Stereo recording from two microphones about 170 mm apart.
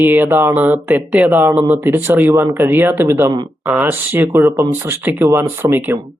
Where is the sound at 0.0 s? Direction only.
10° right (ahead or behind).